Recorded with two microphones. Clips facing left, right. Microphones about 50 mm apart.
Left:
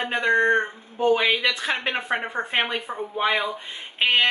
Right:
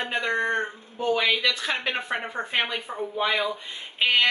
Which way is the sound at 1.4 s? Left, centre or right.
Left.